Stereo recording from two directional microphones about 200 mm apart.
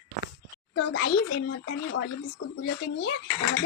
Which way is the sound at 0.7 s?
55° left (ahead or behind).